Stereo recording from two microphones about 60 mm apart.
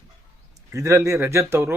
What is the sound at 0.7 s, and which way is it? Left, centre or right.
Speech, right.